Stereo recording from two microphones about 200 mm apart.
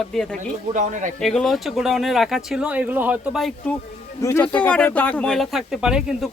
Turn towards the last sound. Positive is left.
turn(degrees=-5)  # may be behind; listen again after turning